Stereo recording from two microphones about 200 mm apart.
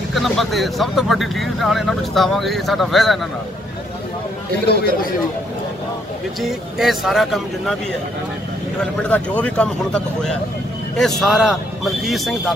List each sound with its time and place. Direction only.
0.1 s speech: centre (ahead or behind)
4.6 s speech: 55° left (ahead or behind)
6.4 s speech: centre (ahead or behind)
9.1 s speech: 5° left (ahead or behind)